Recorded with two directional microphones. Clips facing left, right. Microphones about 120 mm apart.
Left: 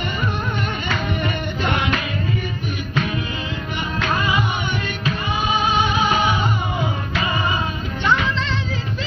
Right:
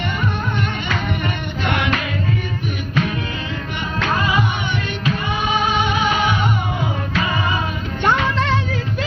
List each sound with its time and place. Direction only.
8.0 s music: 55° right (ahead or behind)